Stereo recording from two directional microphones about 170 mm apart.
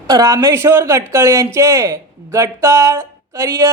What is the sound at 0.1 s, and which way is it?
Speech, 20° right (ahead or behind).